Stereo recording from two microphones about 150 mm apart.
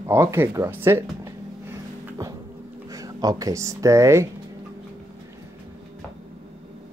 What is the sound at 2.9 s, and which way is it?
Speech, 25° right (ahead or behind).